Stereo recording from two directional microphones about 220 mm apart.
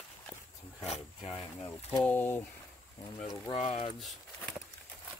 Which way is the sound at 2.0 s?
10° left (ahead or behind).